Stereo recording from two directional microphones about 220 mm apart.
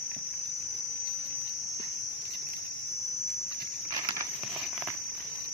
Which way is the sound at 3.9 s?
20° right (ahead or behind).